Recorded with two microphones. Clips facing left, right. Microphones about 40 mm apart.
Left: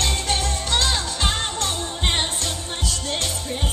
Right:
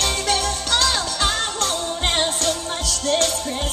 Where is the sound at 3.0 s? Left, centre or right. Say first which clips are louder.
Right 10 dB; right.